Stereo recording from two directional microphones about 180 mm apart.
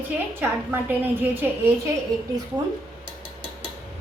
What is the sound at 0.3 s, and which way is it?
A woman's voice, 10° right (ahead or behind).